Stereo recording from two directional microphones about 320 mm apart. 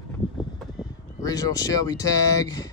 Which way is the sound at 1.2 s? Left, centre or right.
Centre.